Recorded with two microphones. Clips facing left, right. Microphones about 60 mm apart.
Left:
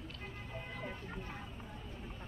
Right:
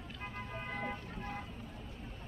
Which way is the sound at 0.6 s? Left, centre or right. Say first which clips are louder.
Right 4 dB; right.